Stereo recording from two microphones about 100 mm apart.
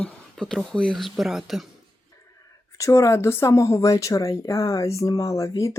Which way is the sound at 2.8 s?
30° left (ahead or behind).